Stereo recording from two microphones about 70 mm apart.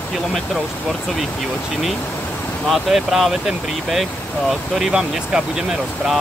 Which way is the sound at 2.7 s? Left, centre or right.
Centre.